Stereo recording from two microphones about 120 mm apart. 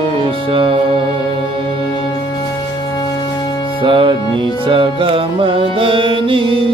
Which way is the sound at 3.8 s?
45° right (ahead or behind).